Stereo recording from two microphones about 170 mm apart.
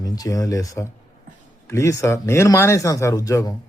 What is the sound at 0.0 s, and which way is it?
Speech, 20° left (ahead or behind).